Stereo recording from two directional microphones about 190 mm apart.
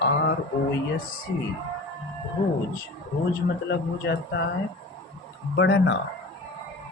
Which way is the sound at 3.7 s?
65° left (ahead or behind).